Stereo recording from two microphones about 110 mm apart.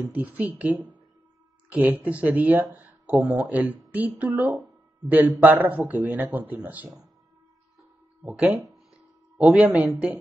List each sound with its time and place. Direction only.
0.1 s speech: 15° right (ahead or behind)
9.4 s speech: 5° right (ahead or behind)